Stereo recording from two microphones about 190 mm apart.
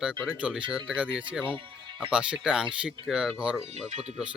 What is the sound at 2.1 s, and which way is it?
Speech, 5° right (ahead or behind).